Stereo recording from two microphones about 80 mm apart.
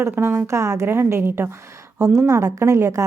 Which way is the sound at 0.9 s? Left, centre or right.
Right.